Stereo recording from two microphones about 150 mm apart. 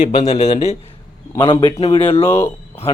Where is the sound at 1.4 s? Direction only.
35° left (ahead or behind).